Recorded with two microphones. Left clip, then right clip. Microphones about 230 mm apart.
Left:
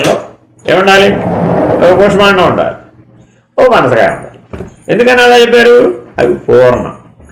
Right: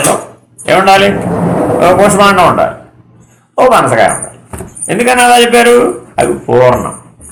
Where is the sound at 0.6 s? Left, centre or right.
Right.